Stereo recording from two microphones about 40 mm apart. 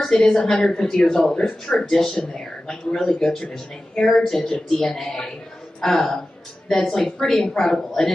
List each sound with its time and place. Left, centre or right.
0.0 s a woman's voice: centre